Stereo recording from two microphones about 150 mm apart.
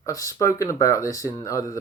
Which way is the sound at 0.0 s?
20° left (ahead or behind).